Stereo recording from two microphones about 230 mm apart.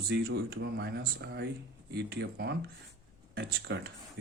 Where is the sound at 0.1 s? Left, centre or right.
Right.